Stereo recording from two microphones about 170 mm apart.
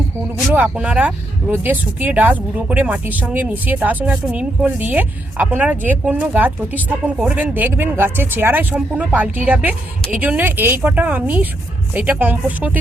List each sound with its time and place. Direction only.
0.5 s speech: 5° right (ahead or behind)